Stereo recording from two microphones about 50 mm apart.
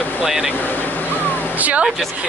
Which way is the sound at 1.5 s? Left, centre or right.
Right.